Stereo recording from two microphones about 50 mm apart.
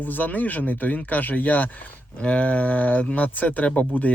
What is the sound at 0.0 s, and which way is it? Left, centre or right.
Speech, left.